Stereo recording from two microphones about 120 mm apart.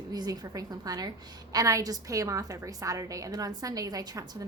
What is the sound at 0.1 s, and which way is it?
A woman's voice, 30° right (ahead or behind).